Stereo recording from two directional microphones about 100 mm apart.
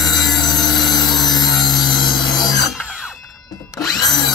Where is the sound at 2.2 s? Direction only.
40° left (ahead or behind).